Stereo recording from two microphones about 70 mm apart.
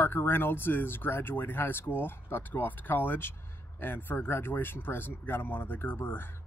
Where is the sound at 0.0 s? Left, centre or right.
Left.